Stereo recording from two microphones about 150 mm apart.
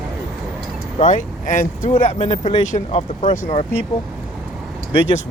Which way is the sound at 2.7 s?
50° left (ahead or behind).